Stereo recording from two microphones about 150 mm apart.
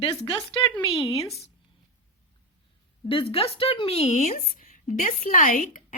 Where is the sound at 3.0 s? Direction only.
35° left (ahead or behind).